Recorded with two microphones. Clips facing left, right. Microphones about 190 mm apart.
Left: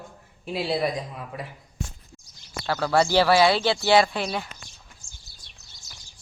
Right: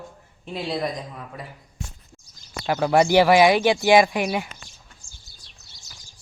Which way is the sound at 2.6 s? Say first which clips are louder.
Right 3 dB; 15° right (ahead or behind).